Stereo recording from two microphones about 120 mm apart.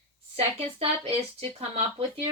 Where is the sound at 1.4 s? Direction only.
60° right (ahead or behind).